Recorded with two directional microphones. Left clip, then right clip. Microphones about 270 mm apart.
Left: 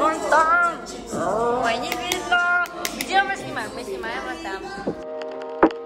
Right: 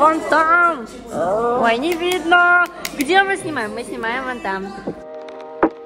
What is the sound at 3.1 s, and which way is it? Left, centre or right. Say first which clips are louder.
A woman's voice: right 6 dB; right.